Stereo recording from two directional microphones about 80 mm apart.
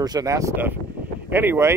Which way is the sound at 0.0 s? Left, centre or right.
Right.